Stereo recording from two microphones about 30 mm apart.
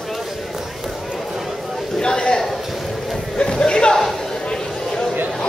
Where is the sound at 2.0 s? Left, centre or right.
Left.